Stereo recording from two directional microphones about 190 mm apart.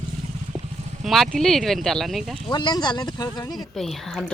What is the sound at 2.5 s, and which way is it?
Speech, 20° left (ahead or behind).